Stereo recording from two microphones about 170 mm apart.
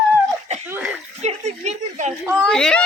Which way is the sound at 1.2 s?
40° right (ahead or behind).